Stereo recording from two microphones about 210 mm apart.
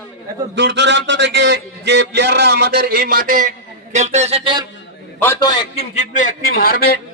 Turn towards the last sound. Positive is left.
turn(degrees=45)  # may be behind; listen again after turning